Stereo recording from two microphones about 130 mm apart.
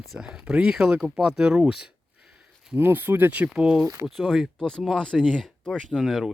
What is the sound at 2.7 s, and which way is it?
Speech, 15° right (ahead or behind).